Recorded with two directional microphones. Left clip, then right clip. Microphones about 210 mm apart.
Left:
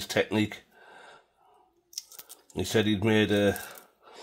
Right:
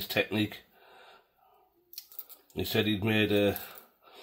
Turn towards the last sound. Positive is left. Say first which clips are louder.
# left 2 dB
turn(degrees=45)  # may be behind; listen again after turning